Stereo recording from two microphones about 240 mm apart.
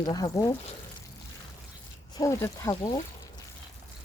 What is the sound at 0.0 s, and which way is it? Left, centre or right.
Speech, centre.